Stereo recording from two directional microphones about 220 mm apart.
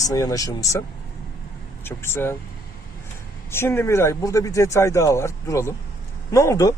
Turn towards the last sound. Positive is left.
turn(degrees=15)  # may be behind; listen again after turning